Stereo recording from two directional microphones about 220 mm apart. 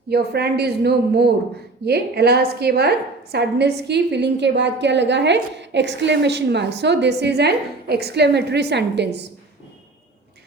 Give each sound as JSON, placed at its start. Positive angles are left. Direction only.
{"t": 0.1, "sound": "a woman's voice", "side_deg": -45}